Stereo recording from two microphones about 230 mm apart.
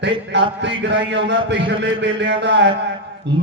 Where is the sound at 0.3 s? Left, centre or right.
Right.